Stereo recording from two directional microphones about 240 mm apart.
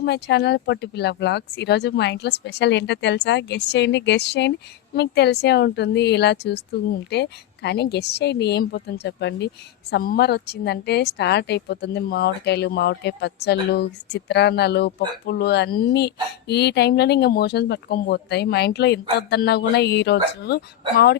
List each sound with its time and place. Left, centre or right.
0.0 s a woman's voice: left